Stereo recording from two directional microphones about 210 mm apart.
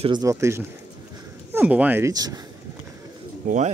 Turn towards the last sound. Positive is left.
turn(degrees=-35)  # may be behind; listen again after turning